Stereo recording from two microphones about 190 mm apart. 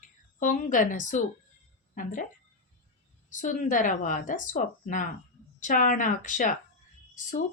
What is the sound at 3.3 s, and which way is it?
Speech, 40° left (ahead or behind).